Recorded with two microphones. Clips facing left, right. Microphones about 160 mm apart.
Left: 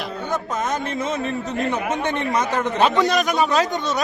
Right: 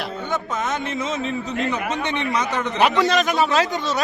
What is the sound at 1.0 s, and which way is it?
A man's voice, 55° left (ahead or behind).